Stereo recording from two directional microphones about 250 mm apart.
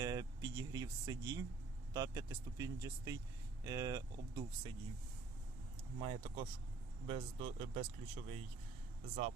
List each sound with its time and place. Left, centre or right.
0.0 s vehicle: centre
1.9 s speech: centre
6.0 s speech: centre